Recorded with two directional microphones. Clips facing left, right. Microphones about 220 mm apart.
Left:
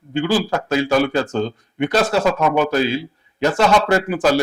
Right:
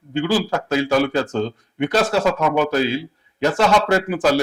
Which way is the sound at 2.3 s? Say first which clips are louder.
Left 1 dB; 20° left (ahead or behind).